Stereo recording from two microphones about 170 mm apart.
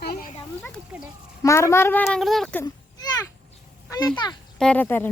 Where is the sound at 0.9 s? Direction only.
5° right (ahead or behind).